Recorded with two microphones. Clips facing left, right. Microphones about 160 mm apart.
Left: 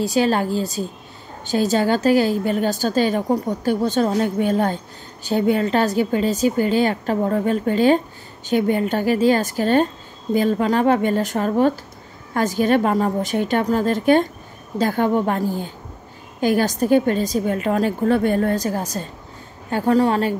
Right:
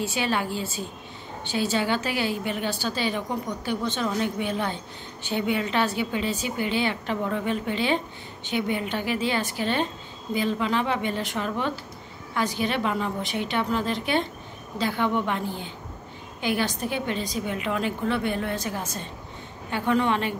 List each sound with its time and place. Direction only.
0.0 s a woman's voice: 40° left (ahead or behind)